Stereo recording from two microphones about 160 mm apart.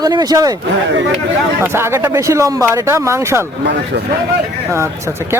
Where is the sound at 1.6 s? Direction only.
15° right (ahead or behind).